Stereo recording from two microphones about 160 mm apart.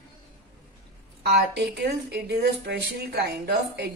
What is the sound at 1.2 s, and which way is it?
A woman's voice, 90° right.